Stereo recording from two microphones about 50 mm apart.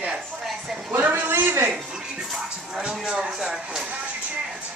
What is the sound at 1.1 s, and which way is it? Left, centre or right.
Speech, right.